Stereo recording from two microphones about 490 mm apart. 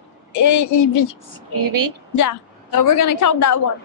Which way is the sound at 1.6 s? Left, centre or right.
Right.